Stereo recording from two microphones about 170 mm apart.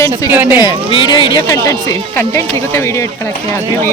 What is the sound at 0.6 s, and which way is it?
Speech, 30° left (ahead or behind).